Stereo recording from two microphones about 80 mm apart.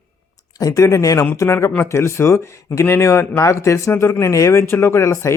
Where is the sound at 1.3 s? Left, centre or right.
Left.